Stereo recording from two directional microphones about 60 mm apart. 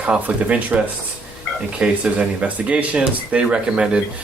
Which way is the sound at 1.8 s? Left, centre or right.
Centre.